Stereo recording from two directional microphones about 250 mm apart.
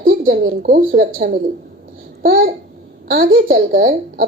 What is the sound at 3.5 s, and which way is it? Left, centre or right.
Speech, right.